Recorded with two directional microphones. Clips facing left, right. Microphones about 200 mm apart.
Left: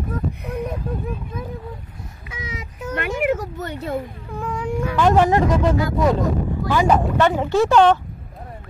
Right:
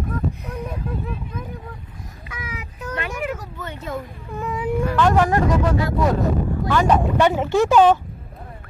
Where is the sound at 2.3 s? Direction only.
25° left (ahead or behind).